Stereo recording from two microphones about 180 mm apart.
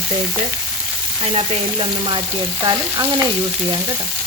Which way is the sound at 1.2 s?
35° right (ahead or behind).